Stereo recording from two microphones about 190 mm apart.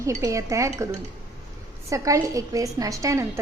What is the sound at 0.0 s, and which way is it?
Speech, 15° right (ahead or behind).